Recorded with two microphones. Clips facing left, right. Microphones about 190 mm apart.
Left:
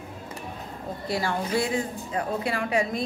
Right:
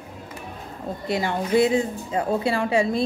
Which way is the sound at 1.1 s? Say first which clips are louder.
Right 5 dB; 20° right (ahead or behind).